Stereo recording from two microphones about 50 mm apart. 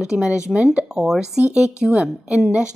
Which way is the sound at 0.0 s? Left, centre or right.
Centre.